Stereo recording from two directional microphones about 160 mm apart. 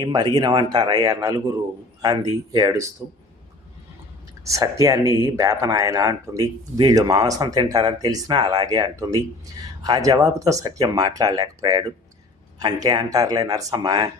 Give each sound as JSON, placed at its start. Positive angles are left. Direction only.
{"t": 0.0, "sound": "speech", "side_deg": -25}
{"t": 4.4, "sound": "speech", "side_deg": -20}